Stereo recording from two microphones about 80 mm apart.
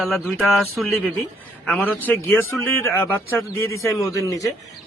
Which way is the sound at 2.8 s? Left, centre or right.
Left.